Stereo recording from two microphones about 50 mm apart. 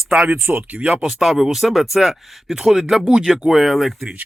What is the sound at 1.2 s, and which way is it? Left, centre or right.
Speech, centre.